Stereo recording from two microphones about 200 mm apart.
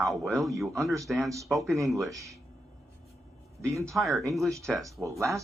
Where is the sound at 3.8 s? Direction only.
Centre (ahead or behind).